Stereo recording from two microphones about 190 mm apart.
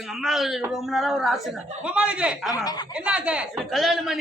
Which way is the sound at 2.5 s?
20° left (ahead or behind).